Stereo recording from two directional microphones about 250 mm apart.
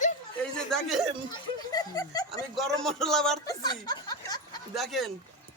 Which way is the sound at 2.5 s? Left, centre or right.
Centre.